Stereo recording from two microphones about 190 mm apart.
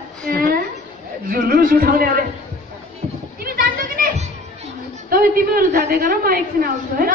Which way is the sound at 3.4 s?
50° right (ahead or behind).